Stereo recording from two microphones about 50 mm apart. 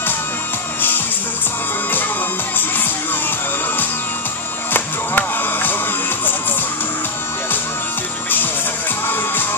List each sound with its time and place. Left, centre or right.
4.7 s music: left
9.0 s music: left